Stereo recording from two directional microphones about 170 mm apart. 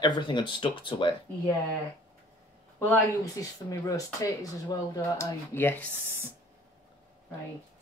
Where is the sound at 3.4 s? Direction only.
20° left (ahead or behind).